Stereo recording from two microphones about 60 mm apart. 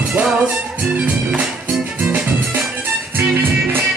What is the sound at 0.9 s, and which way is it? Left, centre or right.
Music, right.